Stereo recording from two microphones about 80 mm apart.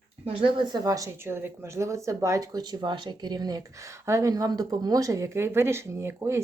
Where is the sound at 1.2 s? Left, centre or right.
Right.